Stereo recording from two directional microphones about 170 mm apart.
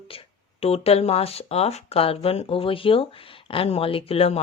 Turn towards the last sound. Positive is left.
turn(degrees=35)  # may be behind; listen again after turning